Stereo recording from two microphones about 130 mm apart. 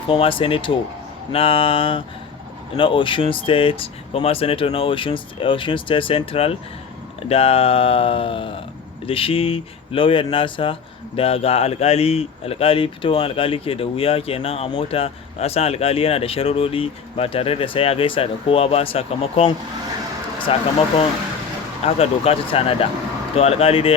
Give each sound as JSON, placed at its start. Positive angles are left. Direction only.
{"t": 0.1, "sound": "speech", "side_deg": 40}
{"t": 20.5, "sound": "speech", "side_deg": 45}
{"t": 21.8, "sound": "speech", "side_deg": 50}